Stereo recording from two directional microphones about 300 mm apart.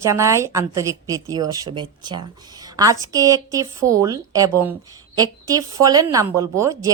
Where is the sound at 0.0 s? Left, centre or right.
Centre.